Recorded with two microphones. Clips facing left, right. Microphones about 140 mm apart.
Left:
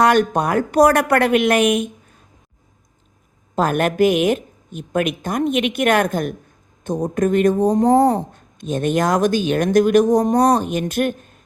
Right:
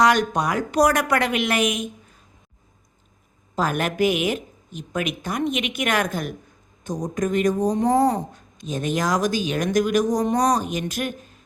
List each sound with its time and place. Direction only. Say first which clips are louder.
0.0 s speech: left 4 dB; 55° left (ahead or behind)
3.5 s speech: left 5 dB; 50° left (ahead or behind)